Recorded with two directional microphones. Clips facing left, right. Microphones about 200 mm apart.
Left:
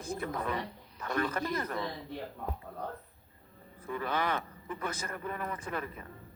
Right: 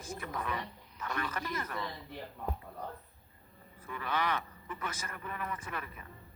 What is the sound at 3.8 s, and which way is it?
A man's voice, 40° left (ahead or behind).